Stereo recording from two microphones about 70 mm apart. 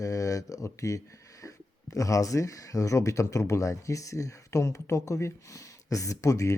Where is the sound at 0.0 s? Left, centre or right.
Left.